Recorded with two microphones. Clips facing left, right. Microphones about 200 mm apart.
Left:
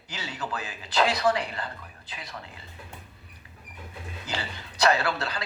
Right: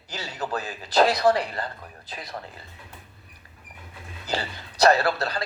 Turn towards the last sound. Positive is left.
turn(degrees=-40)  # may be behind; listen again after turning